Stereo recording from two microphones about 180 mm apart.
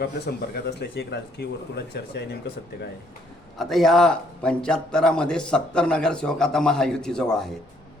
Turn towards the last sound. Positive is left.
turn(degrees=5)  # may be behind; listen again after turning